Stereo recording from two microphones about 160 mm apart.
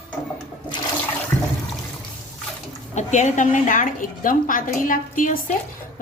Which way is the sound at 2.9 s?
50° left (ahead or behind).